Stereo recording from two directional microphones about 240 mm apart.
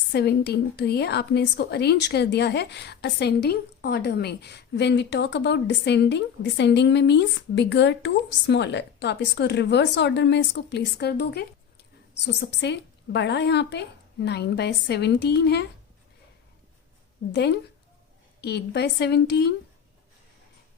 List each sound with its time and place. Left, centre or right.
0.1 s a woman's voice: left
18.3 s a woman's voice: left